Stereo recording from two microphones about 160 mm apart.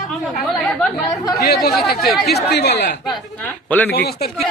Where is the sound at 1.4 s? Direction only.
80° left.